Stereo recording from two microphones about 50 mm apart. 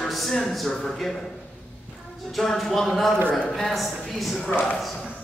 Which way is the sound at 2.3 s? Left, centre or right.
Centre.